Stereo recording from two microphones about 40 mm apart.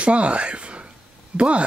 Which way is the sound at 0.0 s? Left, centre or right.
Right.